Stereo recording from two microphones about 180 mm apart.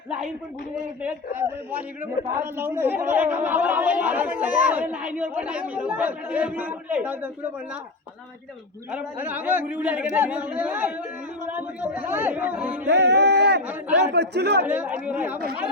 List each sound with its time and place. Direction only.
1.0 s speech: 10° right (ahead or behind)
8.9 s speech: 10° right (ahead or behind)
12.9 s speech: 75° right (ahead or behind)
13.7 s speech: 10° right (ahead or behind)
14.1 s speech: 65° right (ahead or behind)
14.6 s speech: 10° right (ahead or behind)